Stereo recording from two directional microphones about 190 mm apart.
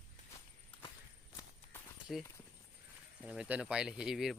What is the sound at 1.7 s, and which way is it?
Clip-clop, 10° left (ahead or behind).